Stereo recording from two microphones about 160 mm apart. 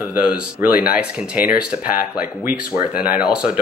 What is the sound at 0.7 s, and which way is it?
Speech, 70° left (ahead or behind).